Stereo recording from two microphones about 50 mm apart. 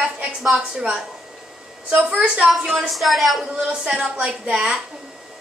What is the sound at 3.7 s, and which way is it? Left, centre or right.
A woman's voice, centre.